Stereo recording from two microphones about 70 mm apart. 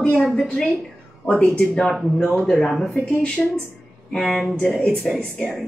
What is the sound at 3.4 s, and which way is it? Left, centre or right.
A woman's voice, centre.